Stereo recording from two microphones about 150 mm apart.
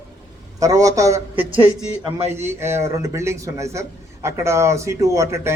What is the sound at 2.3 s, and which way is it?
A man's voice, 15° right (ahead or behind).